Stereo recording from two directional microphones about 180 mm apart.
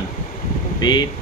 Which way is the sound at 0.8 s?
25° left (ahead or behind).